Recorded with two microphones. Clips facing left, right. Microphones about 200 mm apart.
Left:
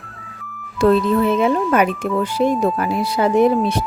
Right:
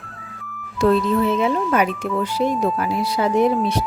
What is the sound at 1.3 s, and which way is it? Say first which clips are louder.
Speech: left 3 dB; 55° left (ahead or behind).